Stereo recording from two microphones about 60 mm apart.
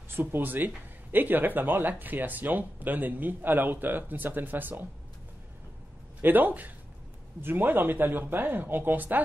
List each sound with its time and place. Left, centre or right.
0.1 s speech: right
6.2 s speech: right